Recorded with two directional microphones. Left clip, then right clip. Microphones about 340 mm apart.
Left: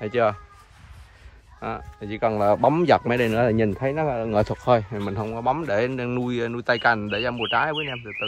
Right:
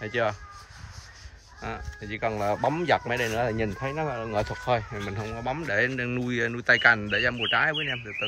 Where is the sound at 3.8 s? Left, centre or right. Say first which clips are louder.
Left 6 dB; left.